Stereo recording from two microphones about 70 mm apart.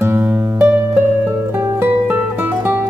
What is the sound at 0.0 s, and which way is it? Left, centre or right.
Music, right.